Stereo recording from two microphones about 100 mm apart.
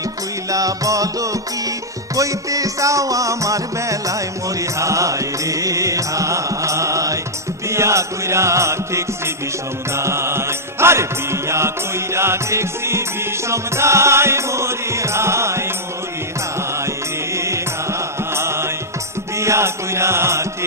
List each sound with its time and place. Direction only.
0.5 s music: 35° right (ahead or behind)
16.8 s music: 30° right (ahead or behind)
19.3 s mantra: 30° right (ahead or behind)